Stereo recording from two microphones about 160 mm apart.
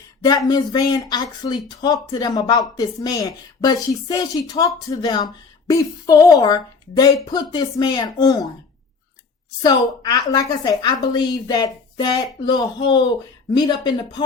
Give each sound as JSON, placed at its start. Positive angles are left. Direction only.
{"t": 0.2, "sound": "speech", "side_deg": 25}
{"t": 9.6, "sound": "speech", "side_deg": 25}